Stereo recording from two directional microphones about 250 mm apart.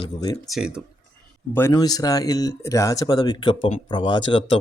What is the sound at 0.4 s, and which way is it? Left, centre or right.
Speech, centre.